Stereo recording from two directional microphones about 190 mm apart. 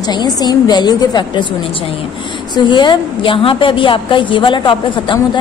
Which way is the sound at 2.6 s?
25° left (ahead or behind).